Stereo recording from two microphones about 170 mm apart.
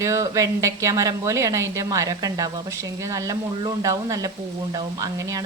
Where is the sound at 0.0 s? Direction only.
20° right (ahead or behind).